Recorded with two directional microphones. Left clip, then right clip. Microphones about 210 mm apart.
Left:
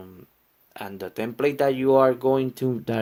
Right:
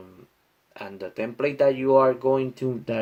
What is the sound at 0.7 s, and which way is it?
Speech, 45° left (ahead or behind).